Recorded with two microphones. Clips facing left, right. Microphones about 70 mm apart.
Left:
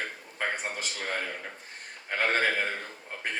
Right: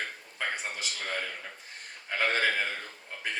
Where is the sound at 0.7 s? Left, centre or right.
Left.